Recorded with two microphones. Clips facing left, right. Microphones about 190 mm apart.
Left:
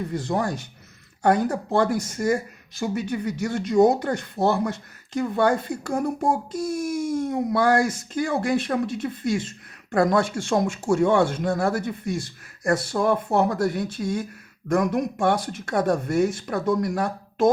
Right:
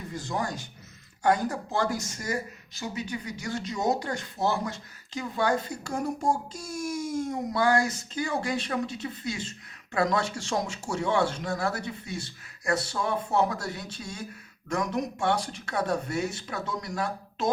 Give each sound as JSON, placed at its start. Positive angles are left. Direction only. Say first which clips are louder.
{"t": 0.1, "sound": "speech", "louder": "left 3 dB", "side_deg": 60}